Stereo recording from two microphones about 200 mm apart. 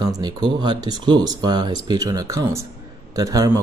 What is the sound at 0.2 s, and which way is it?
Speech, 20° right (ahead or behind).